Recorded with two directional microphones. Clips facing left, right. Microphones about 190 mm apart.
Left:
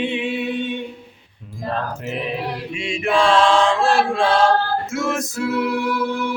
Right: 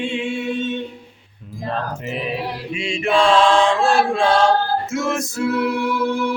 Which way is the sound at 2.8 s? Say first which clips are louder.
Right 1 dB; 5° left (ahead or behind).